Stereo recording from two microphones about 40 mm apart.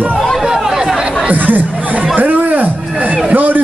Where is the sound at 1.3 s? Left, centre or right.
Right.